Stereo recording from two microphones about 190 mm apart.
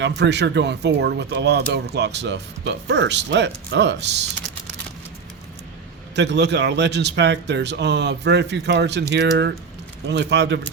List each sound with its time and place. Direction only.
0.2 s speech: 65° right (ahead or behind)
6.1 s speech: 65° right (ahead or behind)